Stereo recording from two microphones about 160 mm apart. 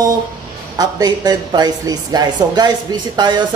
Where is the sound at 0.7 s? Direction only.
25° right (ahead or behind).